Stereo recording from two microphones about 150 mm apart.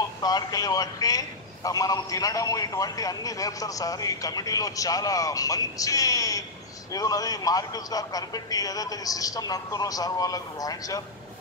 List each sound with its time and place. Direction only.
0.2 s a man's voice: 25° left (ahead or behind)